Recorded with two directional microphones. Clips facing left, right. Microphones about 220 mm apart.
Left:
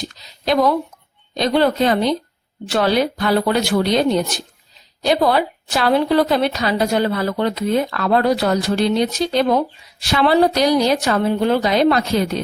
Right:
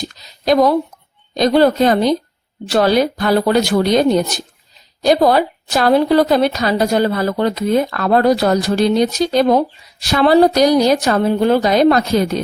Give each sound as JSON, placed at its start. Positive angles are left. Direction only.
{"t": 0.4, "sound": "a woman's voice", "side_deg": -40}